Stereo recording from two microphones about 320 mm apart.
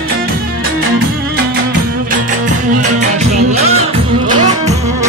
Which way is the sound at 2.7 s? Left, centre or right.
Right.